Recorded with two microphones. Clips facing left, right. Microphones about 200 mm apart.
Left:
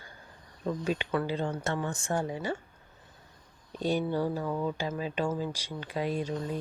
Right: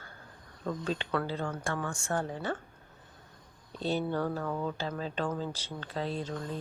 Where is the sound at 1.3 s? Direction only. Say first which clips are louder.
Left 3 dB; 25° left (ahead or behind).